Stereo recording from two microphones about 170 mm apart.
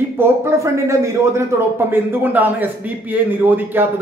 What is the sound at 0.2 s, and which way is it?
A man's voice, 15° right (ahead or behind).